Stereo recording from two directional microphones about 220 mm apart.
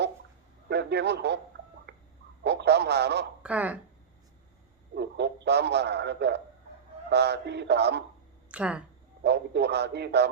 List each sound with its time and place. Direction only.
0.7 s a man's voice: 50° right (ahead or behind)
2.4 s a man's voice: 50° right (ahead or behind)
3.4 s speech: 5° right (ahead or behind)
4.9 s a man's voice: 50° right (ahead or behind)
8.4 s a woman's voice: 5° right (ahead or behind)
9.2 s a man's voice: 50° right (ahead or behind)